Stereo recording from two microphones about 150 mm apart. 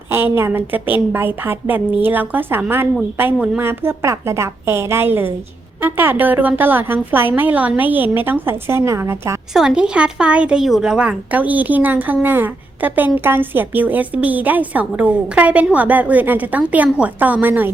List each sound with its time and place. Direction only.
0.1 s speech: 15° right (ahead or behind)
9.5 s speech: 5° right (ahead or behind)